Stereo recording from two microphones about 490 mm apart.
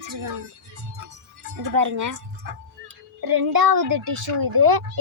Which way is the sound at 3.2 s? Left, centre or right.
Right.